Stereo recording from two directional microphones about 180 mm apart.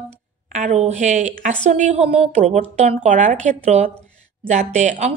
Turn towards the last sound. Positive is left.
turn(degrees=-40)  # may be behind; listen again after turning